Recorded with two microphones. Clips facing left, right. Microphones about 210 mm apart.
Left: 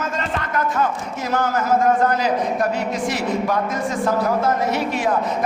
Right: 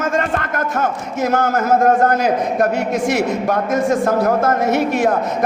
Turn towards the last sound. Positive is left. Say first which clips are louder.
# right 5 dB
turn(degrees=-45)  # may be behind; listen again after turning